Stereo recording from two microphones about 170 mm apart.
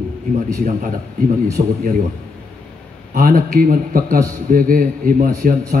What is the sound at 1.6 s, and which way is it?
Speech, 55° right (ahead or behind).